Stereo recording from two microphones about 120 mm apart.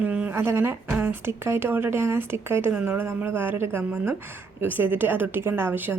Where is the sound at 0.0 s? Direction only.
10° right (ahead or behind).